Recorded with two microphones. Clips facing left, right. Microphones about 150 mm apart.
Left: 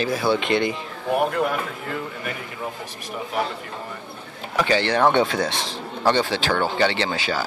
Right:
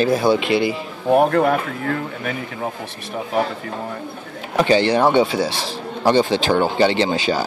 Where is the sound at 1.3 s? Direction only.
70° right (ahead or behind).